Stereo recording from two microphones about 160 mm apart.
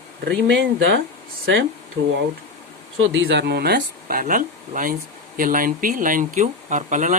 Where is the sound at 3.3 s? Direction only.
90° right.